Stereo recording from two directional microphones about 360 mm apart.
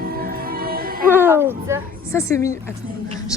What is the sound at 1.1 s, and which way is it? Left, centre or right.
Speech, centre.